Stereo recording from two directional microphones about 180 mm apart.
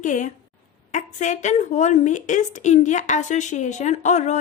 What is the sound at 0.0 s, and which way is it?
A woman's voice, 45° left (ahead or behind).